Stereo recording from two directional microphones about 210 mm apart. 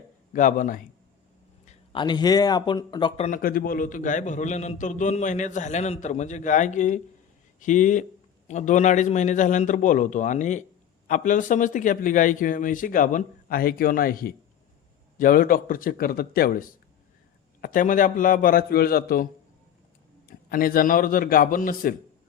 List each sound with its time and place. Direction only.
0.3 s a man's voice: 40° left (ahead or behind)
1.6 s speech: 25° left (ahead or behind)
3.2 s a man's voice: 40° left (ahead or behind)